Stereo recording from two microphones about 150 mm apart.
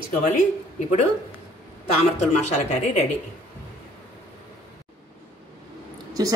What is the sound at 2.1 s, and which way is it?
Speech, 50° left (ahead or behind).